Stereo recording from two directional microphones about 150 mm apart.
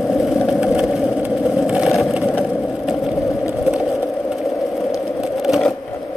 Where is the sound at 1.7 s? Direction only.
5° right (ahead or behind).